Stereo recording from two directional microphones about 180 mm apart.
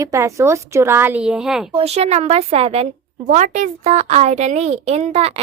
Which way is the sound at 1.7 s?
35° right (ahead or behind).